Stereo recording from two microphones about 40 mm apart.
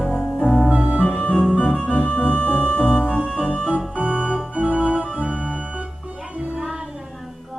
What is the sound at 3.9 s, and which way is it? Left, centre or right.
Organ, right.